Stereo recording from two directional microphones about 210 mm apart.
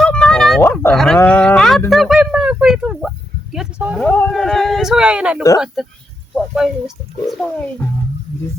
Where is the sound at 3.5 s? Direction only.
5° right (ahead or behind).